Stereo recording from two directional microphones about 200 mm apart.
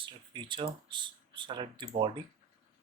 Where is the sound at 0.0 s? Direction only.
25° right (ahead or behind).